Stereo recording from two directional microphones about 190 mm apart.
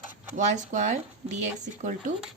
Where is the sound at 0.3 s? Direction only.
40° right (ahead or behind).